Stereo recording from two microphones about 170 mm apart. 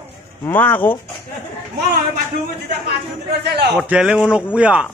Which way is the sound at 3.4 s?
75° right (ahead or behind).